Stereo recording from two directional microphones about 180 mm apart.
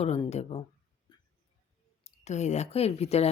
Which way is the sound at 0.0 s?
35° left (ahead or behind).